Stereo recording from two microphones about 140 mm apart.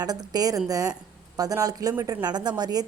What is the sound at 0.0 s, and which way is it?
A woman's voice, 30° right (ahead or behind).